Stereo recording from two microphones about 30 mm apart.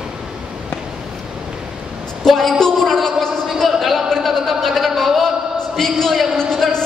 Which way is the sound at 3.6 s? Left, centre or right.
Centre.